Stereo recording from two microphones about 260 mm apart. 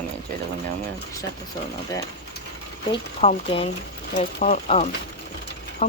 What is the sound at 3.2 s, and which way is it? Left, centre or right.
Speech, left.